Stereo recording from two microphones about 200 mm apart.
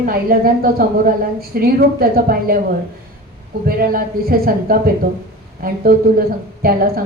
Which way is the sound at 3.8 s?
45° right (ahead or behind).